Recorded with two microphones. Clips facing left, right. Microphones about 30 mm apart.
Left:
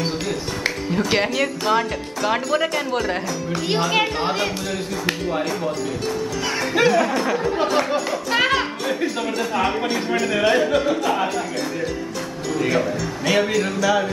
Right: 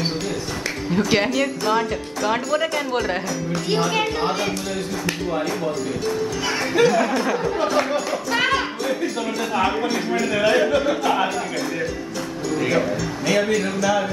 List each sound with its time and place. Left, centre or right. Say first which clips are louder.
0.9 s speech: right 2 dB; centre
3.5 s a woman's voice: left 1 dB; centre
6.9 s speech: left 1 dB; centre